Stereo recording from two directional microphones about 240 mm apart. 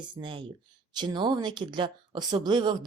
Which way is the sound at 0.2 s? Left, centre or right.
Right.